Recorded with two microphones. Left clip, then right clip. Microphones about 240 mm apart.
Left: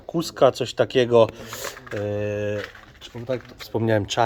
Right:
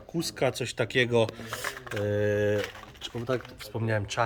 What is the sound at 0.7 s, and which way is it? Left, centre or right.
Speech, centre.